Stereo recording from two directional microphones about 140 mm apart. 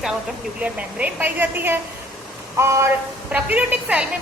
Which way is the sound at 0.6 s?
10° right (ahead or behind).